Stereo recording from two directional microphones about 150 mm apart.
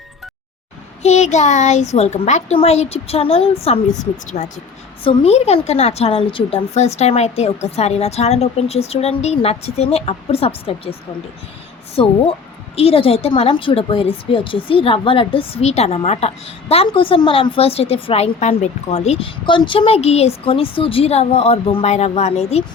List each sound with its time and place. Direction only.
1.0 s a woman's voice: 50° left (ahead or behind)
11.9 s a woman's voice: 40° left (ahead or behind)